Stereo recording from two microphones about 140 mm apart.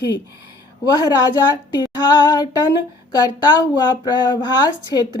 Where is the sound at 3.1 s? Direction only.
30° left (ahead or behind).